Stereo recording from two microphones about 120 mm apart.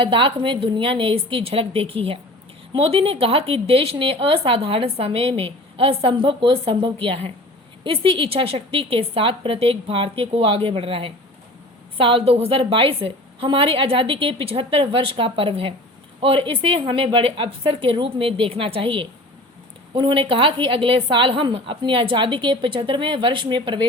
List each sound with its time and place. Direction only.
0.0 s a woman's voice: 45° right (ahead or behind)